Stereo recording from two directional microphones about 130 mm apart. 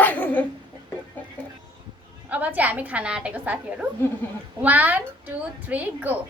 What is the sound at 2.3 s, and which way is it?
A woman's voice, 10° right (ahead or behind).